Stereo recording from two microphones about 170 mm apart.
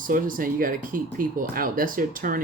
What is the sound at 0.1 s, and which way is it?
Speech, 55° right (ahead or behind).